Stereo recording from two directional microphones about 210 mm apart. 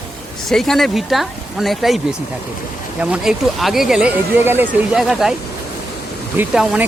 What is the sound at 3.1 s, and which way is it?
Speech, centre (ahead or behind).